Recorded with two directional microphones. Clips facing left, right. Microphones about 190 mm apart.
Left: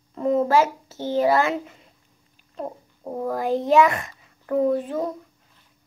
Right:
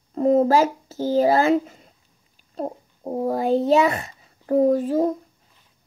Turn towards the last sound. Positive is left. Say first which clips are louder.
# right 4 dB
turn(degrees=-40)  # may be behind; listen again after turning